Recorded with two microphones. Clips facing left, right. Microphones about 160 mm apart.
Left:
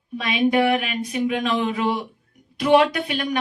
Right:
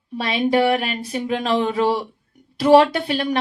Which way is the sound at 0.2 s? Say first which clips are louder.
Right 1 dB; 30° right (ahead or behind).